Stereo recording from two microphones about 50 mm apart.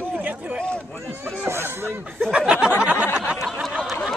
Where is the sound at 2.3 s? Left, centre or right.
Right.